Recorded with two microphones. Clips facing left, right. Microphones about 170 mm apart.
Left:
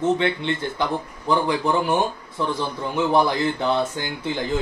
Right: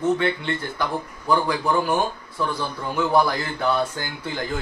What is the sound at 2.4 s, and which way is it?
Speech, 20° left (ahead or behind).